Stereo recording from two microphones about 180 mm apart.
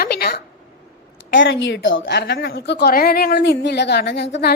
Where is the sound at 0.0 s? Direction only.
60° left (ahead or behind).